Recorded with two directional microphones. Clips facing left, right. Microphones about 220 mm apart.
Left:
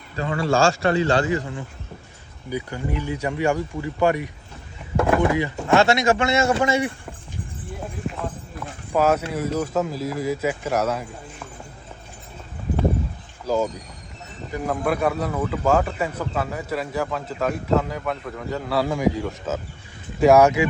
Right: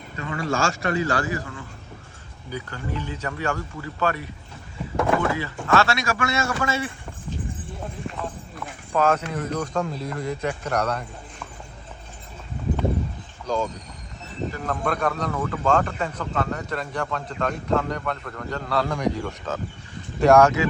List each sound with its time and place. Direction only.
0.2 s a man's voice: 30° left (ahead or behind)
8.0 s clip-clop: 5° left (ahead or behind)
8.9 s speech: 10° left (ahead or behind)
13.5 s speech: 5° left (ahead or behind)